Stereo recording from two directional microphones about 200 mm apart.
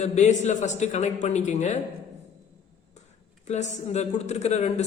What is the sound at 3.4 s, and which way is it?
A woman's voice, 35° left (ahead or behind).